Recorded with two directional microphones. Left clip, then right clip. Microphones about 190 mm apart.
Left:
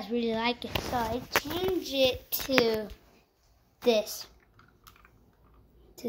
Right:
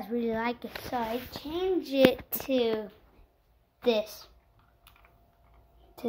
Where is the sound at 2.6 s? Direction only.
Centre (ahead or behind).